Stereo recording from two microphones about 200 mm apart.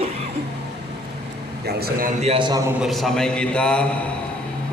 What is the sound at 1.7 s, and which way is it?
Speech, 50° right (ahead or behind).